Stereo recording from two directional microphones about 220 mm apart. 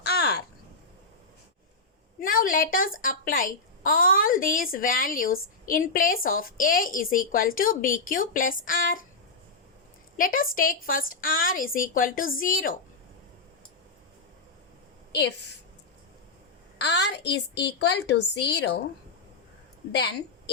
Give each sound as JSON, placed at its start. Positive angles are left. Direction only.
{"t": 0.0, "sound": "a sound", "side_deg": 45}
{"t": 2.2, "sound": "a woman's voice", "side_deg": 40}
{"t": 10.2, "sound": "a woman's voice", "side_deg": 40}
{"t": 16.8, "sound": "a woman's voice", "side_deg": 50}